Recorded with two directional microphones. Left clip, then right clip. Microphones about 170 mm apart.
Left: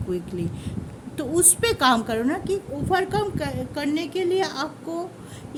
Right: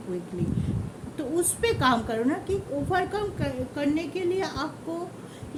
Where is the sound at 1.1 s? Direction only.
60° left (ahead or behind).